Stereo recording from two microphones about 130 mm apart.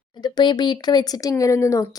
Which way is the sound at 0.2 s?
35° left (ahead or behind).